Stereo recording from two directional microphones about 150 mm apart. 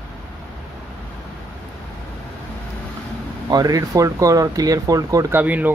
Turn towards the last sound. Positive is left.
turn(degrees=-10)  # may be behind; listen again after turning